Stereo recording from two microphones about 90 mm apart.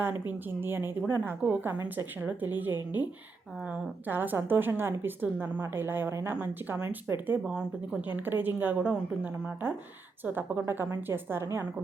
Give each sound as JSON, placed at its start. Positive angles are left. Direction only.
{"t": 0.0, "sound": "a woman's voice", "side_deg": -20}
{"t": 7.4, "sound": "speech", "side_deg": -10}
{"t": 8.1, "sound": "a woman's voice", "side_deg": -20}